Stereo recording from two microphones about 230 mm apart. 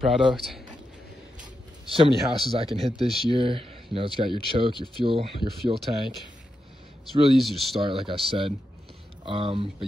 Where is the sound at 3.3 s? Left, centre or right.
Right.